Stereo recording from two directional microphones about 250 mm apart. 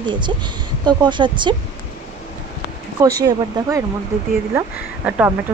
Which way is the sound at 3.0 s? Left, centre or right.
Centre.